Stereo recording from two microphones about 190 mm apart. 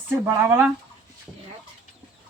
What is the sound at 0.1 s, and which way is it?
Speech, 15° right (ahead or behind).